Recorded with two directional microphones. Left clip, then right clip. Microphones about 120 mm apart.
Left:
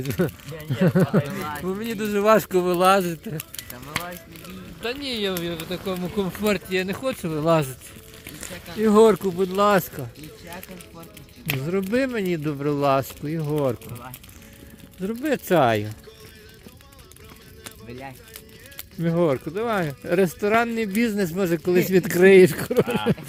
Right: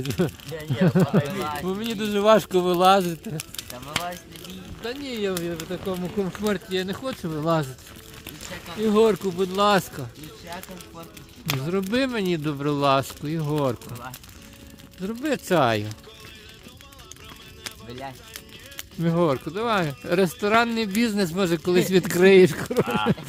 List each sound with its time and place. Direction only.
0.0 s speech: 5° right (ahead or behind)
0.7 s speech: 20° right (ahead or behind)
1.4 s speech: 10° left (ahead or behind)
1.6 s speech: 15° right (ahead or behind)
3.8 s a sound: centre (ahead or behind)
4.8 s speech: 5° left (ahead or behind); by 6.2 s 30° left (ahead or behind)
6.2 s speech: 15° left (ahead or behind)
6.7 s speech: 5° left (ahead or behind)
8.9 s speech: 25° left (ahead or behind)
9.4 s speech: centre (ahead or behind)
11.7 s speech: 20° right (ahead or behind)
15.0 s speech: 10° right (ahead or behind)
19.0 s speech: 20° right (ahead or behind)